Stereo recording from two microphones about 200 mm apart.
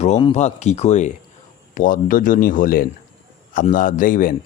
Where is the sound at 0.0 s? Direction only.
30° left (ahead or behind).